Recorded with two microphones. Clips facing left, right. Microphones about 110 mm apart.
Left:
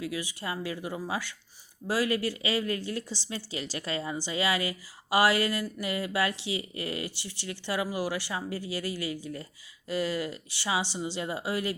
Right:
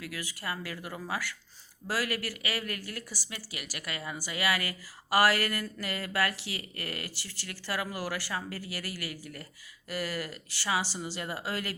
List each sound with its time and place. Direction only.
0.0 s a woman's voice: 20° left (ahead or behind)